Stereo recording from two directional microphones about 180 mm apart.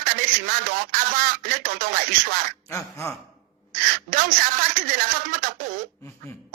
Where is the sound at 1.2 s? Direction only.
50° right (ahead or behind).